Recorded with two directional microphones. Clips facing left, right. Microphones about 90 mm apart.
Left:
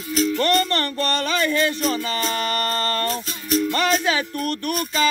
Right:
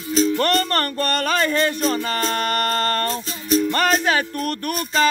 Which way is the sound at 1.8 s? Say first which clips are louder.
Right 2 dB; 30° right (ahead or behind).